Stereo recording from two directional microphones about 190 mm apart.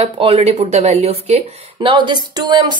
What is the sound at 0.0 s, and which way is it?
A woman's voice, 30° right (ahead or behind).